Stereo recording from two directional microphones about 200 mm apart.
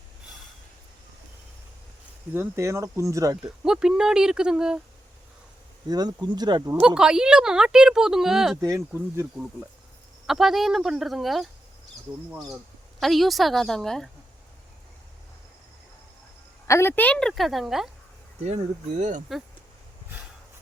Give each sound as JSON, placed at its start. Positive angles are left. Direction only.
{"t": 2.3, "sound": "speech", "side_deg": -10}
{"t": 3.6, "sound": "speech", "side_deg": -5}
{"t": 5.9, "sound": "speech", "side_deg": -20}
{"t": 6.7, "sound": "speech", "side_deg": -5}
{"t": 8.6, "sound": "speech", "side_deg": -15}
{"t": 10.2, "sound": "speech", "side_deg": 0}
{"t": 16.6, "sound": "speech", "side_deg": 15}
{"t": 18.4, "sound": "speech", "side_deg": -35}